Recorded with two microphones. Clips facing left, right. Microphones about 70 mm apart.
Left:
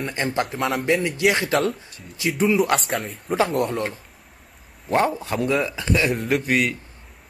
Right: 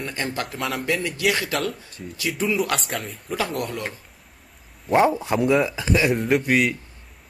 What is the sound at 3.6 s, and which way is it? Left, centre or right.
Speech, left.